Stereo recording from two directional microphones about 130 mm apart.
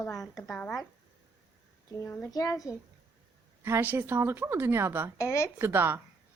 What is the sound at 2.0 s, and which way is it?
Speech, 20° left (ahead or behind).